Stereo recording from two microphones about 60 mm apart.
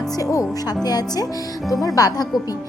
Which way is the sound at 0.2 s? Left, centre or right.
Left.